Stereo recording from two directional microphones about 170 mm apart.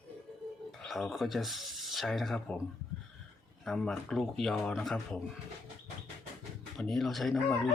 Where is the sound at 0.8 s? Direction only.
Centre (ahead or behind).